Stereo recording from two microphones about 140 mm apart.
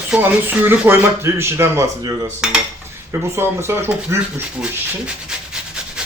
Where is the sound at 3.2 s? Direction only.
20° right (ahead or behind).